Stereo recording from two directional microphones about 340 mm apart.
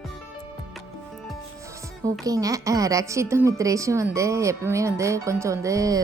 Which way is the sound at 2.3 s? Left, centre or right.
Centre.